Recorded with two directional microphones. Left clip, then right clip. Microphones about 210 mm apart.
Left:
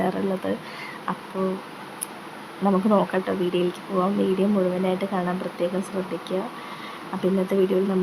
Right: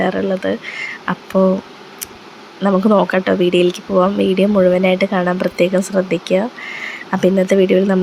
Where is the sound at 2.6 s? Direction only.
15° right (ahead or behind).